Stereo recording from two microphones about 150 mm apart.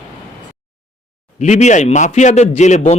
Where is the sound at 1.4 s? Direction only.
50° left (ahead or behind).